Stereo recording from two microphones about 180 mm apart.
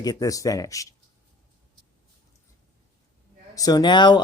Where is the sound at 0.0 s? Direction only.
20° left (ahead or behind).